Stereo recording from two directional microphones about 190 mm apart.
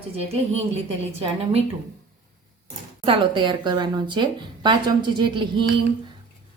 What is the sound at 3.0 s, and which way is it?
Speech, 25° right (ahead or behind).